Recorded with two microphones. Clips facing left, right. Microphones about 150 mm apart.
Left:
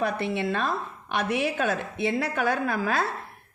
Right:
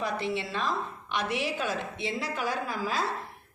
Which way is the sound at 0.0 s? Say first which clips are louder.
Left 4 dB; 55° left (ahead or behind).